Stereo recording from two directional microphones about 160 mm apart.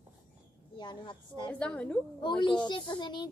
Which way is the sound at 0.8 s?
25° left (ahead or behind).